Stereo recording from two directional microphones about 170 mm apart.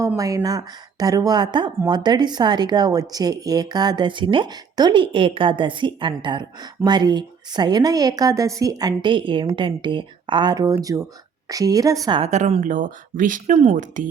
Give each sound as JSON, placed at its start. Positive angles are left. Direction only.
{"t": 0.0, "sound": "speech", "side_deg": -20}
{"t": 12.2, "sound": "speech", "side_deg": -40}